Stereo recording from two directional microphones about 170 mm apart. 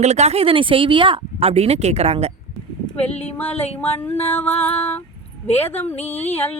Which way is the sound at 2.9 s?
40° left (ahead or behind).